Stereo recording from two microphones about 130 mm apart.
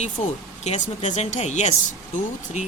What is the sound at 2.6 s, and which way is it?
Speech, 65° left (ahead or behind).